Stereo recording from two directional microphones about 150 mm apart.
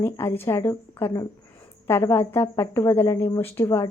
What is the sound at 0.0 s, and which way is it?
A woman's voice, 15° left (ahead or behind).